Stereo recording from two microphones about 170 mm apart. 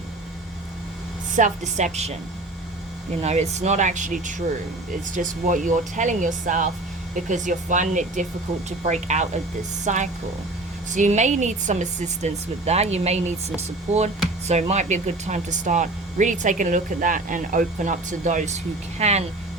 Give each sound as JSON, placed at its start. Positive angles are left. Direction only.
{"t": 1.4, "sound": "speech", "side_deg": -45}
{"t": 3.2, "sound": "speech", "side_deg": -40}